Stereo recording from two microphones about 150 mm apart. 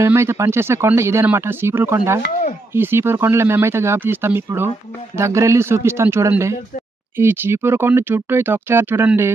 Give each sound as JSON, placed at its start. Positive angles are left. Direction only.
{"t": 0.0, "sound": "speech", "side_deg": -15}